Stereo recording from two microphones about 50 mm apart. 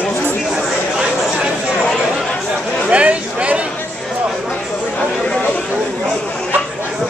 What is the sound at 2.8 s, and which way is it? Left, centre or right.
Chatter, right.